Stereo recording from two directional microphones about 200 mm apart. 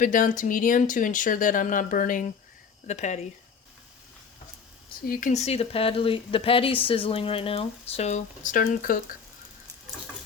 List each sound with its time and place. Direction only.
0.0 s speech: 40° left (ahead or behind)
5.0 s speech: 45° left (ahead or behind)